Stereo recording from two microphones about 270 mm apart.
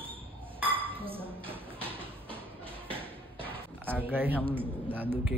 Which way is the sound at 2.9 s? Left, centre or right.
Centre.